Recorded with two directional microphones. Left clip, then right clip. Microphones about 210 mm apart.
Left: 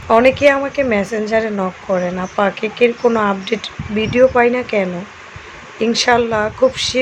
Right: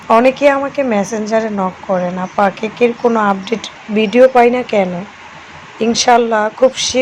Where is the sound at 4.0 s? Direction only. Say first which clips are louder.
Right 4 dB; 15° right (ahead or behind).